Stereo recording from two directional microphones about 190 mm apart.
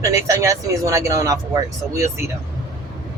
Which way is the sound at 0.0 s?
15° right (ahead or behind).